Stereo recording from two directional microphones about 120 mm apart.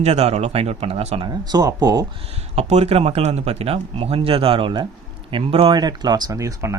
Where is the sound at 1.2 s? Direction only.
35° right (ahead or behind).